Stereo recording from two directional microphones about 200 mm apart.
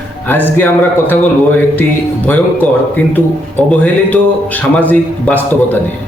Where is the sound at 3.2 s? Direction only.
10° left (ahead or behind).